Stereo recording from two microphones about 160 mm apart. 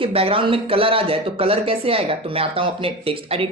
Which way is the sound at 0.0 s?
35° right (ahead or behind).